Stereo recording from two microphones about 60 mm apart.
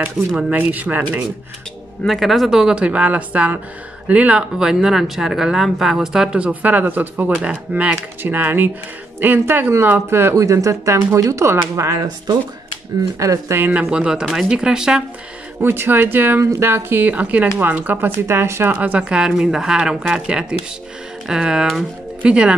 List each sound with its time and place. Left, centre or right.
0.5 s speech: right
2.0 s speech: centre; by 4.5 s right
4.6 s speech: centre
7.9 s speech: right
10.3 s speech: right
11.1 s speech: right
11.4 s speech: right
13.2 s speech: right
13.7 s speech: centre
15.6 s speech: right
16.3 s speech: right
16.6 s speech: right
18.8 s speech: right